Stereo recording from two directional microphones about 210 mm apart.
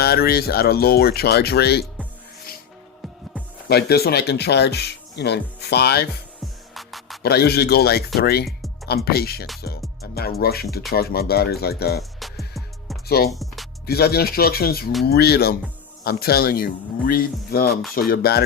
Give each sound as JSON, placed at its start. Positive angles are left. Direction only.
{"t": 0.0, "sound": "speech", "side_deg": 45}
{"t": 3.7, "sound": "speech", "side_deg": 50}
{"t": 6.4, "sound": "music", "side_deg": 0}
{"t": 7.2, "sound": "speech", "side_deg": 50}
{"t": 13.1, "sound": "speech", "side_deg": 50}
{"t": 13.3, "sound": "music", "side_deg": 0}
{"t": 13.8, "sound": "speech", "side_deg": 50}